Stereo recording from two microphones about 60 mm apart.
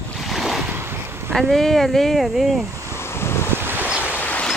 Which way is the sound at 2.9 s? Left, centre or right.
Left.